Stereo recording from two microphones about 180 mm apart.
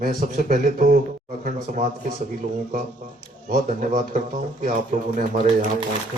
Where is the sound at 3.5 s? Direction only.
45° right (ahead or behind).